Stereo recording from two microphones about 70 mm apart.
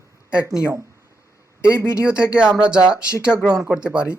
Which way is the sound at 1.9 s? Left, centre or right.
Centre.